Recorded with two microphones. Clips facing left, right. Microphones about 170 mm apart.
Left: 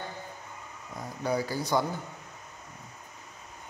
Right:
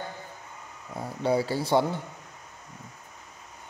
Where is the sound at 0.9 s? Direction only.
30° right (ahead or behind).